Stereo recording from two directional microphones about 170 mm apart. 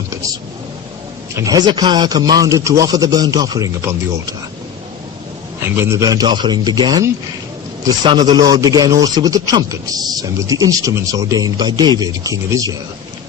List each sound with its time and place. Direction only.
1.4 s speech: 20° right (ahead or behind)
5.6 s speech: 15° right (ahead or behind)